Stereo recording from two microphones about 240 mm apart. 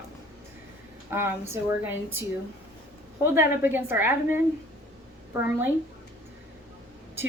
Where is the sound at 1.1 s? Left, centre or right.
Centre.